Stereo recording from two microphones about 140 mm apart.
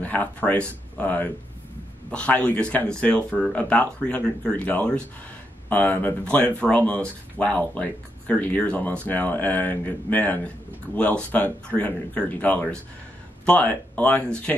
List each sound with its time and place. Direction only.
0.0 s speech: 10° left (ahead or behind)